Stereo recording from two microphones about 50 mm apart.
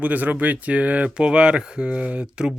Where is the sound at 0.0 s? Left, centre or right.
Right.